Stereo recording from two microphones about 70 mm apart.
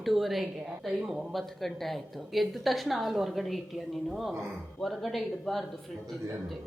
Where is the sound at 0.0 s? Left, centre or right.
Centre.